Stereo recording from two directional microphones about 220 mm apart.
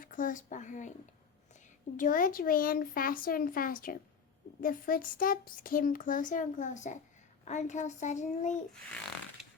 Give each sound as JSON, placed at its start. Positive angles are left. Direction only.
{"t": 0.0, "sound": "speech", "side_deg": 35}
{"t": 2.0, "sound": "speech", "side_deg": 40}